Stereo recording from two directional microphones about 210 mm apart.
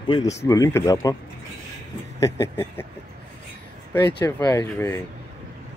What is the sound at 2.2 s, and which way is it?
Speech, 15° left (ahead or behind).